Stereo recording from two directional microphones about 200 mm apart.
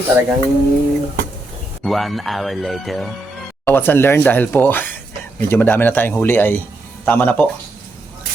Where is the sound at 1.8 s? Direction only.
Centre (ahead or behind).